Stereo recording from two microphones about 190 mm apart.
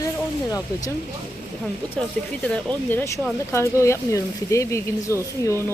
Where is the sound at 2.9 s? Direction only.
10° left (ahead or behind).